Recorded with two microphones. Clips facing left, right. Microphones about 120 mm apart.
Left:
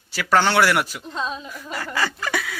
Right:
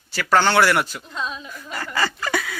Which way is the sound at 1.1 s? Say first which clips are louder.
Left 2 dB; 30° left (ahead or behind).